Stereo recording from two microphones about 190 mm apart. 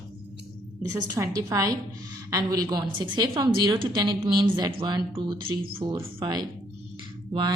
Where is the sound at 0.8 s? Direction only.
15° right (ahead or behind).